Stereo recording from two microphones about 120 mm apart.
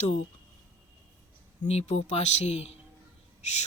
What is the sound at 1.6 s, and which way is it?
Speech, 65° left (ahead or behind).